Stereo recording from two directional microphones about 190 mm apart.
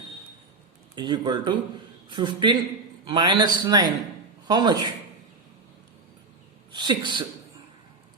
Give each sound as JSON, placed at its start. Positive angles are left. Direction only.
{"t": 0.9, "sound": "a man's voice", "side_deg": -25}
{"t": 6.7, "sound": "speech", "side_deg": -25}